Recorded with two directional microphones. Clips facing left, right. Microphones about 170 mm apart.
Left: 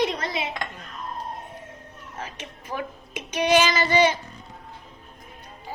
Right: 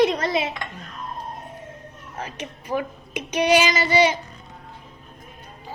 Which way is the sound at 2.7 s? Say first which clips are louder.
Right 5 dB; 15° right (ahead or behind).